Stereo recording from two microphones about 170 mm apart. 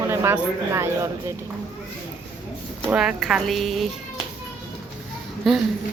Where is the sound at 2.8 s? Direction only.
Centre (ahead or behind).